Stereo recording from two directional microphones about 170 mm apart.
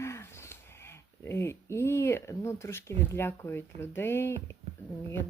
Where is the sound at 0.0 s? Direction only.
15° left (ahead or behind).